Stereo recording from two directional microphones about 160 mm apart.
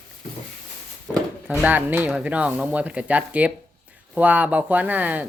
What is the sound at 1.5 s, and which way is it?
Speech, 10° right (ahead or behind).